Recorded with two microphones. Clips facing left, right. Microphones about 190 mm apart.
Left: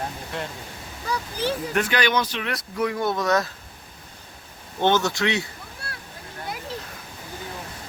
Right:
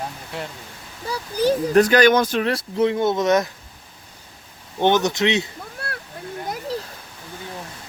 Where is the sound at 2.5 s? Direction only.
25° right (ahead or behind).